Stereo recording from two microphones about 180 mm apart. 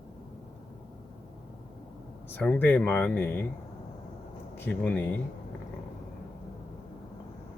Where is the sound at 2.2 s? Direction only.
10° left (ahead or behind).